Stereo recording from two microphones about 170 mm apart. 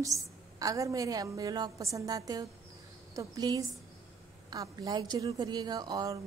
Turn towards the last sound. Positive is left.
turn(degrees=-20)  # may be behind; listen again after turning